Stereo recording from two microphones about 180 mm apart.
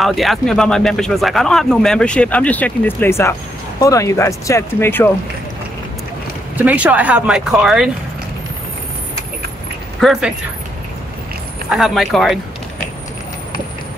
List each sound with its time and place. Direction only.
0.0 s speech: centre (ahead or behind)
6.5 s speech: 10° right (ahead or behind)
9.9 s speech: centre (ahead or behind)
11.7 s speech: centre (ahead or behind)